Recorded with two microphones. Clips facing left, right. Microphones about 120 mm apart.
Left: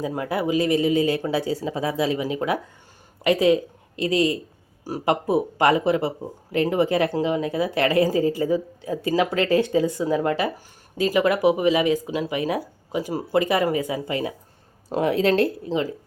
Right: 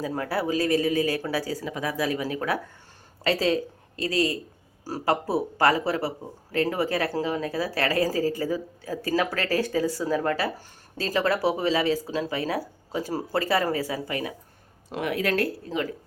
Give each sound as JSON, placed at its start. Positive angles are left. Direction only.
{"t": 0.0, "sound": "speech", "side_deg": 15}